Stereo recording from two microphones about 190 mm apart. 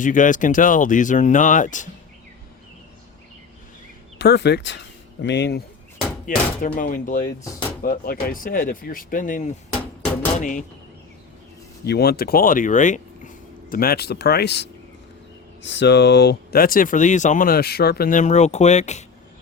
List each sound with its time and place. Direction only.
0.0 s speech: 45° left (ahead or behind)
4.2 s speech: 60° left (ahead or behind)
6.6 s speech: 45° left (ahead or behind)
11.9 s speech: 55° left (ahead or behind); by 19.0 s 35° left (ahead or behind)